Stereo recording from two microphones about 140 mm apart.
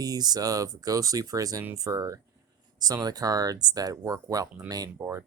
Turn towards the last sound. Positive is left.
turn(degrees=-15)  # may be behind; listen again after turning